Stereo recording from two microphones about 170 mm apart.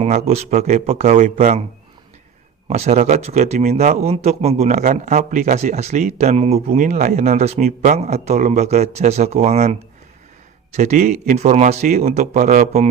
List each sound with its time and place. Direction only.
0.0 s speech: 40° right (ahead or behind)
2.6 s speech: 40° right (ahead or behind)
10.8 s speech: 50° right (ahead or behind)